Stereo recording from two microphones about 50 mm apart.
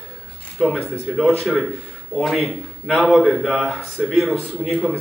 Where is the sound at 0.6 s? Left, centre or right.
Centre.